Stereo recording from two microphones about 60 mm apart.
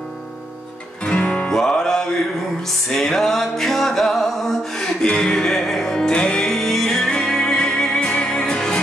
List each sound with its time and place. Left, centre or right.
1.0 s music: centre